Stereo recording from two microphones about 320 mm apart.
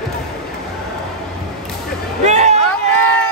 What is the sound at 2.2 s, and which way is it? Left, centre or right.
Music, right.